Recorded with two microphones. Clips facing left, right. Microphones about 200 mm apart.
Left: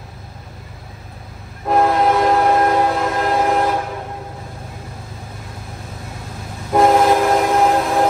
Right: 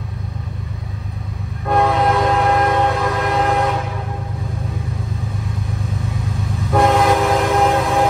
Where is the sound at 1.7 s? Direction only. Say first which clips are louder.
Left 1 dB; centre (ahead or behind).